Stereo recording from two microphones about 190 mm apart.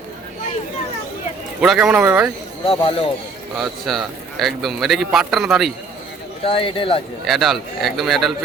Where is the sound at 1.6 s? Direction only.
5° right (ahead or behind).